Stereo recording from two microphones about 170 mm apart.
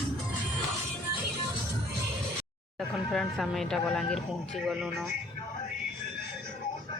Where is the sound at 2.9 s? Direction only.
Centre (ahead or behind).